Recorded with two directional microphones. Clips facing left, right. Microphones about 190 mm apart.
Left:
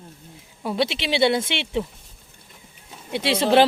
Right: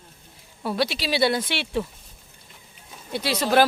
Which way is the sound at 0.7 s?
20° left (ahead or behind).